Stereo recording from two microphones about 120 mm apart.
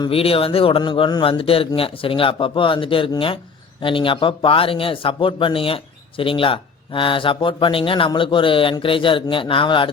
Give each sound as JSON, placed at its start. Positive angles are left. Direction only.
{"t": 0.1, "sound": "speech", "side_deg": 50}
{"t": 0.8, "sound": "speech", "side_deg": 40}